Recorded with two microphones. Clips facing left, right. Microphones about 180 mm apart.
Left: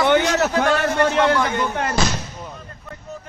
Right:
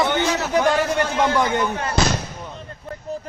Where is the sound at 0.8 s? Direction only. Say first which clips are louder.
Left 3 dB; 60° left (ahead or behind).